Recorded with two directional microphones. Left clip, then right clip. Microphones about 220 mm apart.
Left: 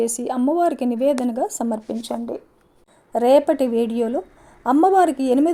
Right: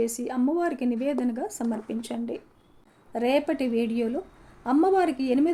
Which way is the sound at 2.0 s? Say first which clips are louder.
Left 6 dB; 15° left (ahead or behind).